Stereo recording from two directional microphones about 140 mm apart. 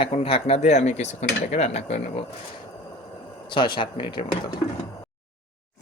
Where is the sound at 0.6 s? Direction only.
55° left (ahead or behind).